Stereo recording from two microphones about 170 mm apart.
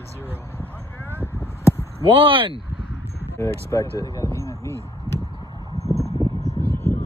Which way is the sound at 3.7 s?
20° left (ahead or behind).